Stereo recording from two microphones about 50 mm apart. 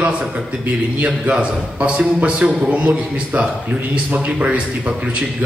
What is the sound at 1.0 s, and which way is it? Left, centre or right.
A man's voice, right.